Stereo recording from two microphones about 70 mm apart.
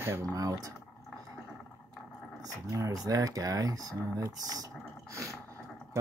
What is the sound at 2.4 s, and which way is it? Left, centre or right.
Speech, right.